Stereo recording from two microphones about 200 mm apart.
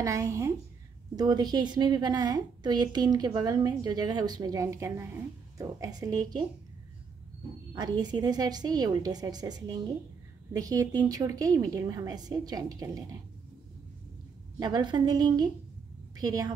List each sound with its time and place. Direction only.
0.0 s a woman's voice: 15° right (ahead or behind)
7.7 s a woman's voice: 20° right (ahead or behind)
14.6 s a woman's voice: 20° right (ahead or behind)